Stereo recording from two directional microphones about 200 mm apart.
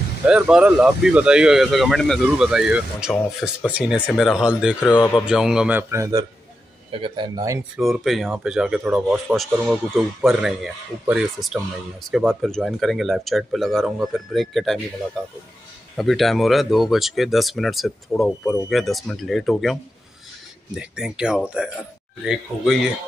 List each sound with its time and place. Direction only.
0.3 s speech: 5° right (ahead or behind)
6.9 s speech: 25° right (ahead or behind)
7.7 s speech: centre (ahead or behind)
16.0 s speech: centre (ahead or behind)
18.4 s speech: 10° left (ahead or behind)
18.7 s speech: centre (ahead or behind)